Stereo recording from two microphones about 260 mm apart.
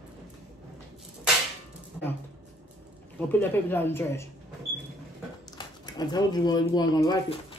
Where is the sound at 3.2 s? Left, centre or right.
Centre.